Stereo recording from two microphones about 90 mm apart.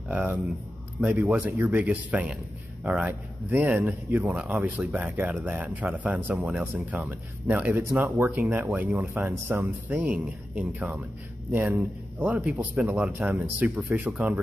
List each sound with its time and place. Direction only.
0.1 s speech: 15° right (ahead or behind)
1.3 s speech: 20° right (ahead or behind)